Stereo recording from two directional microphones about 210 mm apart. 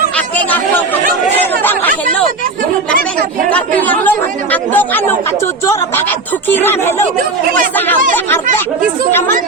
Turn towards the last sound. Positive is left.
turn(degrees=10)  # may be behind; listen again after turning